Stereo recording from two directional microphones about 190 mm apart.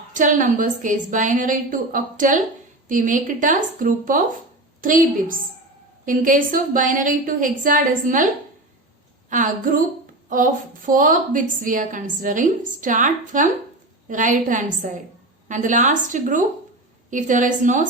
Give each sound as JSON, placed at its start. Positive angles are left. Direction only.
{"t": 0.1, "sound": "a woman's voice", "side_deg": -40}
{"t": 9.3, "sound": "a woman's voice", "side_deg": -45}